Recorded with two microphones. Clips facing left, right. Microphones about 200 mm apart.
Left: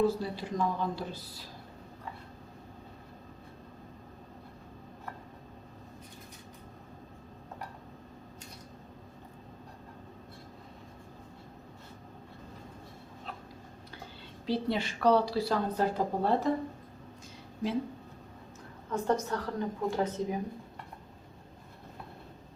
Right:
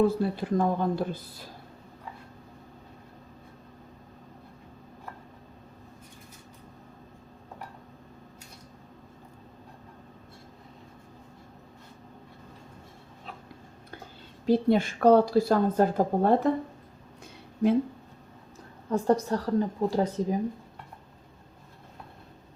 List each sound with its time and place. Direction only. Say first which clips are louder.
0.0 s a woman's voice: right 5 dB; 55° right (ahead or behind)
14.4 s a woman's voice: right 8 dB; 50° right (ahead or behind)
18.9 s a woman's voice: right 6 dB; 35° right (ahead or behind)